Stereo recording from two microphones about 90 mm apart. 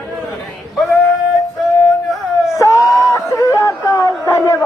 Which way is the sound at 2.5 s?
35° left (ahead or behind).